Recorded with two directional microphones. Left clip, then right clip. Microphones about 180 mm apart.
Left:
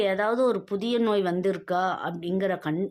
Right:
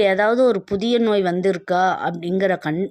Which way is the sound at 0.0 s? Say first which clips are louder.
Right 8 dB; 30° right (ahead or behind).